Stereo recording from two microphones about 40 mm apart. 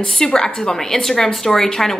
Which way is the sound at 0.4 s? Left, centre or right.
Centre.